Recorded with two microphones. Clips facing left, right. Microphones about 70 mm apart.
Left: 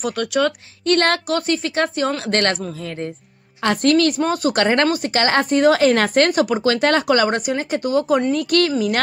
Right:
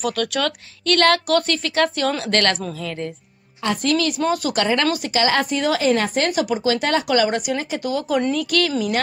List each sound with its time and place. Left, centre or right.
0.0 s speech: left
3.6 s speech: left
4.2 s speech: left